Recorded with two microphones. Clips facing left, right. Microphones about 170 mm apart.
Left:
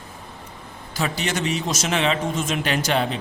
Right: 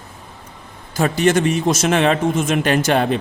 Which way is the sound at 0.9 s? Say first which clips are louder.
Right 10 dB; 50° right (ahead or behind).